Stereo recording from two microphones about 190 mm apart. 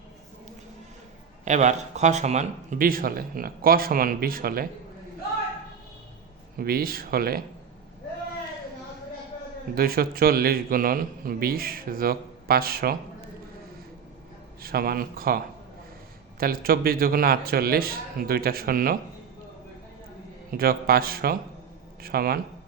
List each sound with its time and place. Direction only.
1.5 s speech: 40° right (ahead or behind)
6.6 s speech: 50° right (ahead or behind)
9.7 s speech: 50° right (ahead or behind)
14.6 s speech: 50° right (ahead or behind)
16.4 s speech: 50° right (ahead or behind)
20.5 s speech: 50° right (ahead or behind)